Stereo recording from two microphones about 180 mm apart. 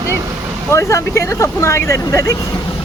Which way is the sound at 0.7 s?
15° left (ahead or behind).